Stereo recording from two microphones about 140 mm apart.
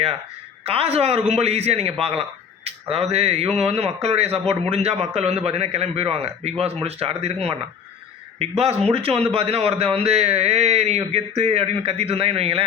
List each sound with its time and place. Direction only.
0.6 s a man's voice: 45° right (ahead or behind)